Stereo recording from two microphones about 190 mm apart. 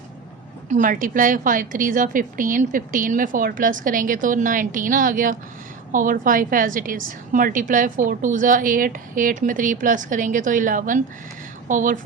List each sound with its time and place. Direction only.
0.7 s a woman's voice: 45° right (ahead or behind)